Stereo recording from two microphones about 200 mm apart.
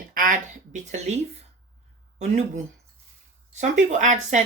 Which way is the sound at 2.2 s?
35° right (ahead or behind).